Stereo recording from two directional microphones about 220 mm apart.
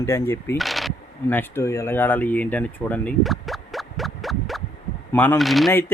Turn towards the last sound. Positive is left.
turn(degrees=0)  # may be behind; listen again after turning